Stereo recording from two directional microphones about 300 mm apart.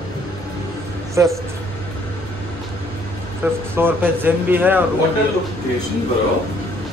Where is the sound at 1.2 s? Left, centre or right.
Centre.